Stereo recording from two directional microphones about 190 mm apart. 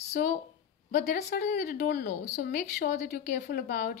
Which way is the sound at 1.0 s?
55° left (ahead or behind).